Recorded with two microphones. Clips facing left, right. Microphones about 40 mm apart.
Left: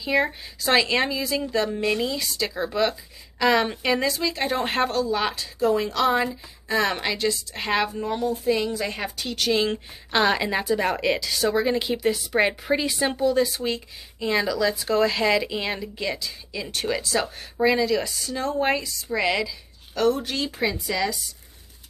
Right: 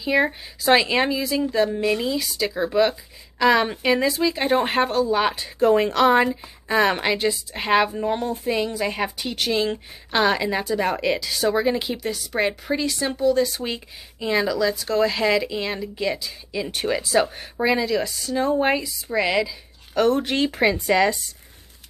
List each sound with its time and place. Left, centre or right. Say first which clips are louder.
0.0 s speech: right 2 dB; centre
5.6 s speech: right 4 dB; right
6.2 s speech: right 4 dB; centre
9.5 s speech: left 1 dB; centre
13.6 s speech: left 1 dB; centre
19.4 s a sound: right 1 dB; right
20.2 s speech: right 5 dB; right